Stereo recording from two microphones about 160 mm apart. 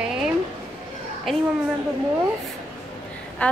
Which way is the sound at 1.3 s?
Centre (ahead or behind).